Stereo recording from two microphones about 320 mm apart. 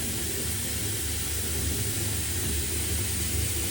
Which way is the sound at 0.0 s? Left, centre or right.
Centre.